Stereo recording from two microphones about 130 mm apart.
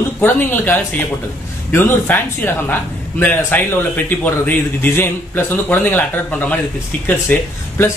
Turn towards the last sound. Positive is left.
turn(degrees=15)  # may be behind; listen again after turning